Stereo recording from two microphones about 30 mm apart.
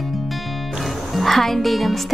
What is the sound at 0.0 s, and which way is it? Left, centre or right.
Music, centre.